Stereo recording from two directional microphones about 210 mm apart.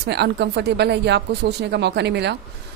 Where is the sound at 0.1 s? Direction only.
50° right (ahead or behind).